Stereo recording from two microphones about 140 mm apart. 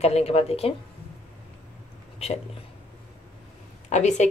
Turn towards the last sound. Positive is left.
turn(degrees=55)  # may be behind; listen again after turning